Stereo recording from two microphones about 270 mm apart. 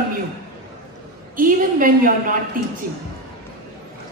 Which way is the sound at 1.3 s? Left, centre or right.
Right.